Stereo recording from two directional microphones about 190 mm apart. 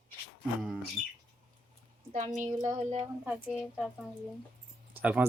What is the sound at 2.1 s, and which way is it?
Speech, 40° right (ahead or behind).